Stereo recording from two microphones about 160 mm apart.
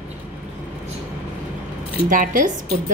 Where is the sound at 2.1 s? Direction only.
60° right (ahead or behind).